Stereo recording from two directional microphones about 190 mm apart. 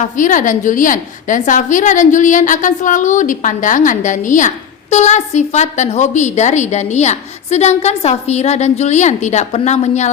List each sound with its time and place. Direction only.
0.0 s a woman's voice: 45° left (ahead or behind)